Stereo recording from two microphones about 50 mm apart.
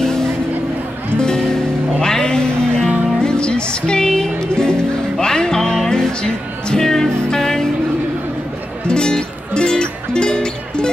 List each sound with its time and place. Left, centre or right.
1.2 s music: centre
8.8 s music: centre